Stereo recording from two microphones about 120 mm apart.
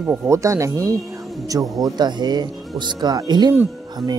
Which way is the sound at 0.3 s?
25° right (ahead or behind).